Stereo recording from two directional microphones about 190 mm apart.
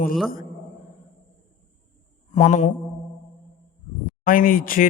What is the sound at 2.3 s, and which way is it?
Mantra, 40° left (ahead or behind).